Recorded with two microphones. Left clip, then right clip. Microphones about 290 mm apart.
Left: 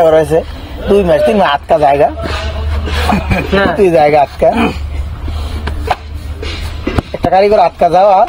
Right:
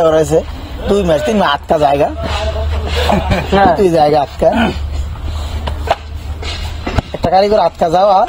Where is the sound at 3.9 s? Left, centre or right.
Centre.